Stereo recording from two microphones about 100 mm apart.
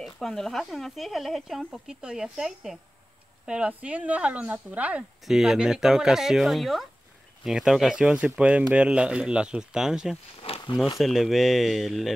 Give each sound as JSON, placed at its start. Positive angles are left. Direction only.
{"t": 0.0, "sound": "speech", "side_deg": 5}
{"t": 10.4, "sound": "a sound", "side_deg": 70}
{"t": 11.0, "sound": "speech", "side_deg": 0}